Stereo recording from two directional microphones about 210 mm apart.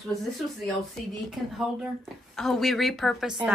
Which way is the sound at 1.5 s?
Centre (ahead or behind).